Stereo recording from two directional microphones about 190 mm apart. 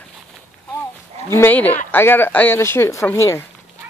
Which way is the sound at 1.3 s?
10° left (ahead or behind).